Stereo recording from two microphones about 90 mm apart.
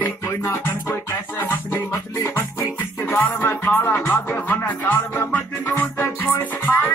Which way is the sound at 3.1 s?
25° left (ahead or behind).